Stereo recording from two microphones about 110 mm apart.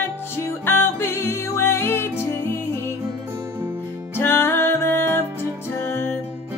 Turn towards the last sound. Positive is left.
turn(degrees=20)  # may be behind; listen again after turning